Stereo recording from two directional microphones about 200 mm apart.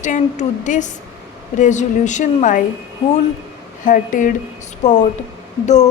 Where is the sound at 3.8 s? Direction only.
40° left (ahead or behind).